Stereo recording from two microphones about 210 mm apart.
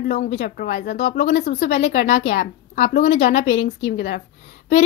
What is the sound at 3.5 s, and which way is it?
Speech, 65° left (ahead or behind).